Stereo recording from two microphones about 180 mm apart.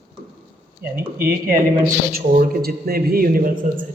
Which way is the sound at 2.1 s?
55° right (ahead or behind).